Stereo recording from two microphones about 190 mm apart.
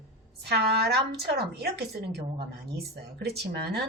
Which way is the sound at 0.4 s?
60° right (ahead or behind).